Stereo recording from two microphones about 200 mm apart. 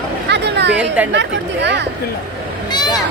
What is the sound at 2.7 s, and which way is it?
Vehicle, 20° left (ahead or behind).